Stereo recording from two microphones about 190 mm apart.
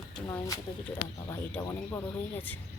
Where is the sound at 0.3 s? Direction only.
15° left (ahead or behind).